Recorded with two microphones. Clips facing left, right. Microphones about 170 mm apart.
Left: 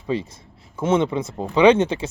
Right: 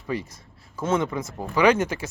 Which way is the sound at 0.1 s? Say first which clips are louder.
Left 4 dB; 25° left (ahead or behind).